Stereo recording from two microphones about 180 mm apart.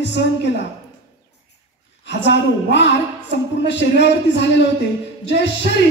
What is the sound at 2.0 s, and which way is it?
A woman's voice, 80° left.